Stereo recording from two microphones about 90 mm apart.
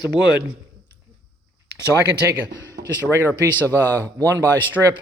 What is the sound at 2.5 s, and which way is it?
Speech, 30° left (ahead or behind).